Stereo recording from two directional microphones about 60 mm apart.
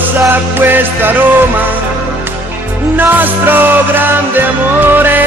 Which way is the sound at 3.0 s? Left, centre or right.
Right.